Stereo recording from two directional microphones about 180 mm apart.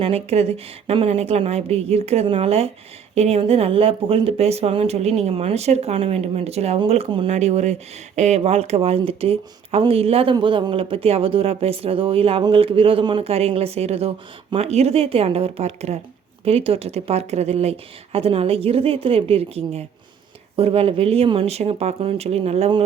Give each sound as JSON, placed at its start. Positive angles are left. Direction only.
{"t": 0.0, "sound": "speech", "side_deg": -35}